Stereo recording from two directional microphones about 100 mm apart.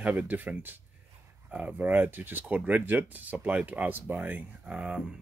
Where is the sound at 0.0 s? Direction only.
15° right (ahead or behind).